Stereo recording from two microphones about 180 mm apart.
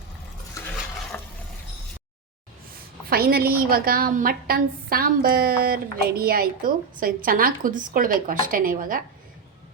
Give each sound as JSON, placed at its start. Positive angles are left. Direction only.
{"t": 3.1, "sound": "a woman's voice", "side_deg": -55}